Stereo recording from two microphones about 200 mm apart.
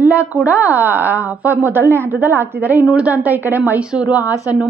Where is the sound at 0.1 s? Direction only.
5° right (ahead or behind).